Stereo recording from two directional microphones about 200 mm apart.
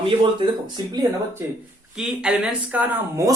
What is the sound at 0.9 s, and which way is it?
Speech, 15° right (ahead or behind).